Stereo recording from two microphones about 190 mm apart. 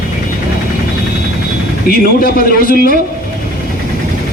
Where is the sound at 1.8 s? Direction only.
50° left (ahead or behind).